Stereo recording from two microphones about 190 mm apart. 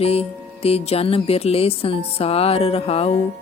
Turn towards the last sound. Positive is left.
turn(degrees=30)  # may be behind; listen again after turning